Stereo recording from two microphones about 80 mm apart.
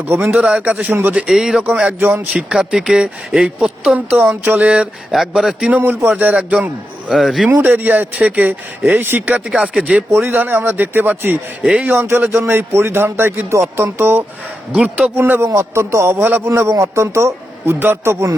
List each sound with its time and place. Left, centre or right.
0.2 s speech: centre
5.1 s speech: centre
5.8 s speech: right
7.1 s speech: centre
7.4 s speech: right
9.5 s speech: centre
10.1 s speech: right
11.6 s speech: centre
12.0 s speech: right
15.2 s a man's voice: right